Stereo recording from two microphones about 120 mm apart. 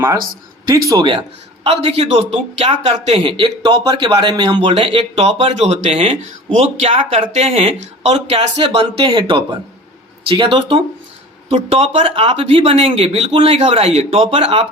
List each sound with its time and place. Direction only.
0.7 s speech: 30° right (ahead or behind)
1.6 s speech: 55° right (ahead or behind)
4.7 s a man's voice: 50° right (ahead or behind)